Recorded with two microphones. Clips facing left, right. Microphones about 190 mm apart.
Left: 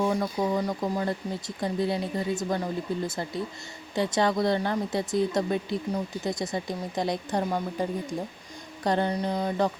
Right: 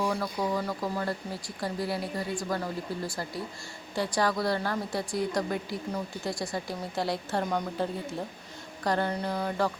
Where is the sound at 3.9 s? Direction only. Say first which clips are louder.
Left 3 dB; 20° left (ahead or behind).